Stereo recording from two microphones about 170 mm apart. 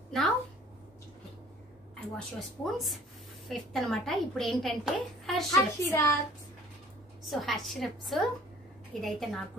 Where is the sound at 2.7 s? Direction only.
Centre (ahead or behind).